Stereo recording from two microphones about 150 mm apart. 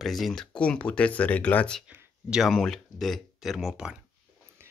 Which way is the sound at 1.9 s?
10° right (ahead or behind).